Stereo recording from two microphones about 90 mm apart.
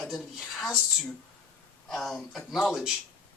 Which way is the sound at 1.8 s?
5° left (ahead or behind).